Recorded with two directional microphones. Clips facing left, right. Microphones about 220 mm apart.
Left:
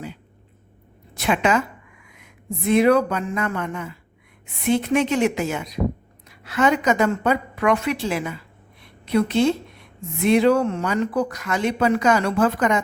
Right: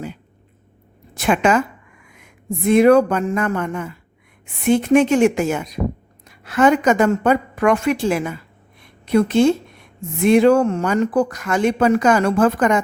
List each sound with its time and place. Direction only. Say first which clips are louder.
1.1 s a woman's voice: right 4 dB; 50° right (ahead or behind)
2.6 s speech: right 5 dB; 50° right (ahead or behind)